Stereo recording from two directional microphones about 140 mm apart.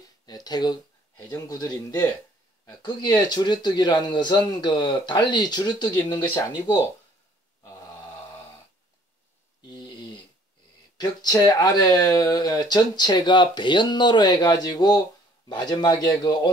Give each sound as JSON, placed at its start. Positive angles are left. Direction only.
{"t": 0.3, "sound": "speech", "side_deg": 30}
{"t": 9.7, "sound": "a sound", "side_deg": 30}
{"t": 11.0, "sound": "speech", "side_deg": 30}